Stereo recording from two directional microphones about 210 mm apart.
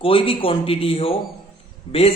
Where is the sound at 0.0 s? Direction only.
25° left (ahead or behind).